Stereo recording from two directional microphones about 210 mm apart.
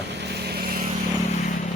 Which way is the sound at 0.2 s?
50° right (ahead or behind).